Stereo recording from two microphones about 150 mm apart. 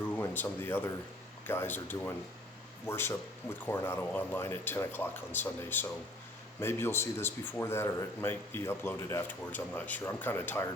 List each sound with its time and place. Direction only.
0.2 s speech: 15° left (ahead or behind)